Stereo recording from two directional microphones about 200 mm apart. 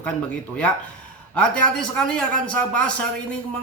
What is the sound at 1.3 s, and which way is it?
A man's voice, 5° left (ahead or behind).